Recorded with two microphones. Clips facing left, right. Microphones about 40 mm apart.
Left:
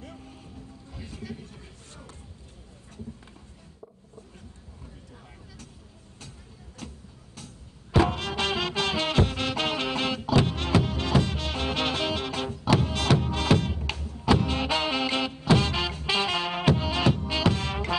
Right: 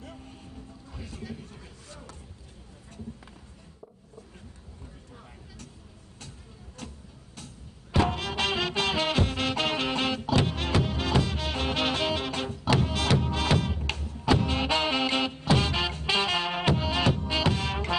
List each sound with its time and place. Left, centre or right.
6.8 s vehicle: centre
7.9 s music: centre